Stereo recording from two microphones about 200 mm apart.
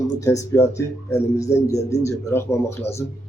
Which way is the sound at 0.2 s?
15° left (ahead or behind).